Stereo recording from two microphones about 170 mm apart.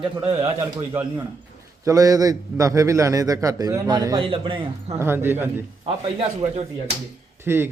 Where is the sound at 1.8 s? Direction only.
20° right (ahead or behind).